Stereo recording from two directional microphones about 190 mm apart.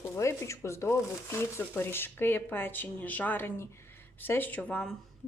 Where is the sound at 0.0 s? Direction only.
15° left (ahead or behind).